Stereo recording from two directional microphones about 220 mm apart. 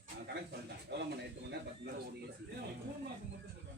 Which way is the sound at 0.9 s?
50° right (ahead or behind).